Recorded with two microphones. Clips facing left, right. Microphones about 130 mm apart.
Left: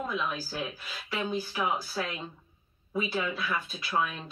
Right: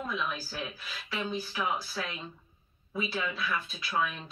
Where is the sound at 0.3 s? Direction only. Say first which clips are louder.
Left 3 dB; 15° left (ahead or behind).